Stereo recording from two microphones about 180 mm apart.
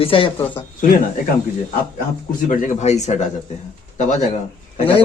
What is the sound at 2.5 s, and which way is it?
Speech, 40° left (ahead or behind).